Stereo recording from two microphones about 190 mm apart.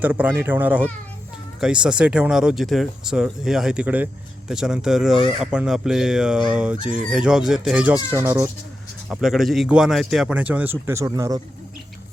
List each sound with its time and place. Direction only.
0.0 s speech: 10° right (ahead or behind)
9.0 s speech: centre (ahead or behind)